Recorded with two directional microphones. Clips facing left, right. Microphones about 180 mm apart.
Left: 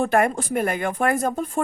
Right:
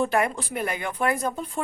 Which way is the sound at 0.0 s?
50° left (ahead or behind).